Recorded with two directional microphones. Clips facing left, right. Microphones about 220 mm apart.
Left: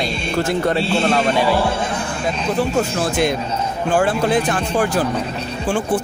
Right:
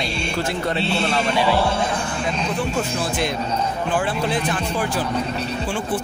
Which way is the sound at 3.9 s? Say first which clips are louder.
Left 7 dB; 45° left (ahead or behind).